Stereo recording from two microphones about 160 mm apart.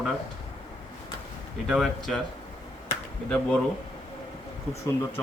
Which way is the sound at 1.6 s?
Centre (ahead or behind).